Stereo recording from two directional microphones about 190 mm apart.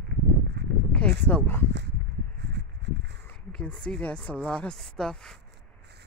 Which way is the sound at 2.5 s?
65° right (ahead or behind).